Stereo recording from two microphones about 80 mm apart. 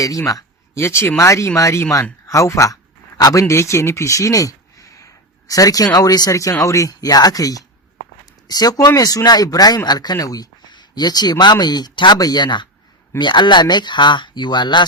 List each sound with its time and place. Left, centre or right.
0.0 s speech: left
3.2 s a man's voice: left
3.4 s speech: left